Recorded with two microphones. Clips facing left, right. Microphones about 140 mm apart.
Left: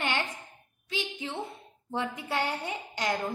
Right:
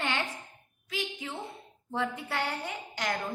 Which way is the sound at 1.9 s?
20° left (ahead or behind).